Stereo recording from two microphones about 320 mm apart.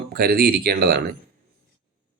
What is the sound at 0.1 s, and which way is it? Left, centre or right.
A man's voice, right.